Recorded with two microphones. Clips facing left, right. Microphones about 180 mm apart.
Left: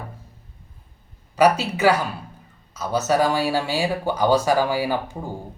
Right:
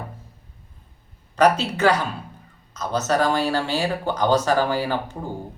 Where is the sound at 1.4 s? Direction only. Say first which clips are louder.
Even; 10° left (ahead or behind).